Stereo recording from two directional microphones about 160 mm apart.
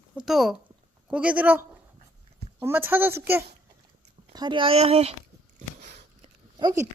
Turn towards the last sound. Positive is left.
turn(degrees=-25)  # may be behind; listen again after turning